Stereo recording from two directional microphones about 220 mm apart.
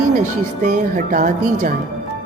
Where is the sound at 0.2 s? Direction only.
35° right (ahead or behind).